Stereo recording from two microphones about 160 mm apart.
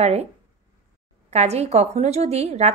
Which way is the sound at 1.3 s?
40° right (ahead or behind).